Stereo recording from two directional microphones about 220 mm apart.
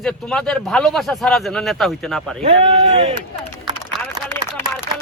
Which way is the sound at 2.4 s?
30° right (ahead or behind).